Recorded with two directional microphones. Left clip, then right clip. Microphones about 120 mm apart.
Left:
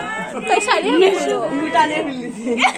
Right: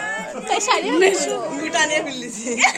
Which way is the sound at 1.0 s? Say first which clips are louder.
Left 2 dB; 10° right (ahead or behind).